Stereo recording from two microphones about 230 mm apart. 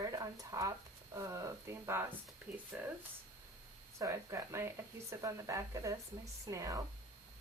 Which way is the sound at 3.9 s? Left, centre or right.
Centre.